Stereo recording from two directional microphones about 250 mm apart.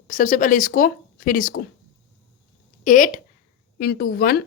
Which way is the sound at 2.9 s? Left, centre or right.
Left.